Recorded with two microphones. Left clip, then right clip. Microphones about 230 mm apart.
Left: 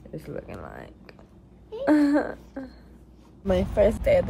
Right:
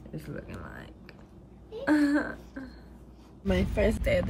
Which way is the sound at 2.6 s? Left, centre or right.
Left.